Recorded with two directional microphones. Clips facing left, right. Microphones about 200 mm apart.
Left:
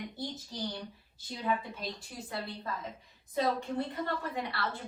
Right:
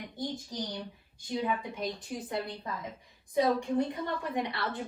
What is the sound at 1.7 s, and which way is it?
A woman's voice, 20° right (ahead or behind).